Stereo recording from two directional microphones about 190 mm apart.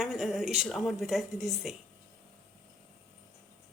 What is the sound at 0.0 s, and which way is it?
A woman's voice, centre (ahead or behind).